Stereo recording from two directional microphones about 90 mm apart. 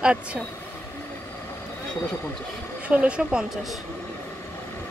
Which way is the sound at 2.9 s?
15° right (ahead or behind).